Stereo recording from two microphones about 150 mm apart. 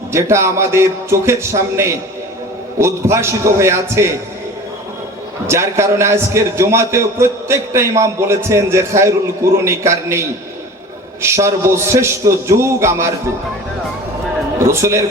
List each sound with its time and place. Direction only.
0.1 s a man's voice: 20° right (ahead or behind)
5.5 s a man's voice: 20° right (ahead or behind)
14.6 s a man's voice: 20° right (ahead or behind)